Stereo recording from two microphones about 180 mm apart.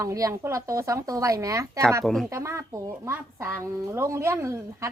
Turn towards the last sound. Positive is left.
turn(degrees=-15)  # may be behind; listen again after turning